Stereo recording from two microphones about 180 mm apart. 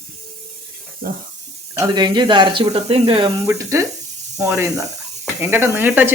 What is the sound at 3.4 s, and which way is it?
Speech, 15° right (ahead or behind).